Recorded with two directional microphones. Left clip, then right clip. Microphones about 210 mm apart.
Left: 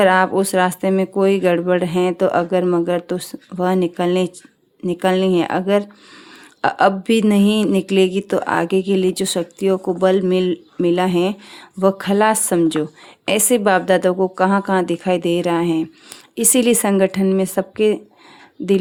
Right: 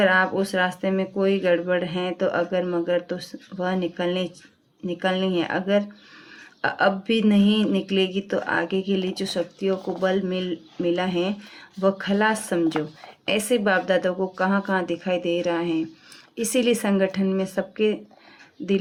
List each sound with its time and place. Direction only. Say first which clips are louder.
0.0 s speech: left 6 dB; 50° left (ahead or behind)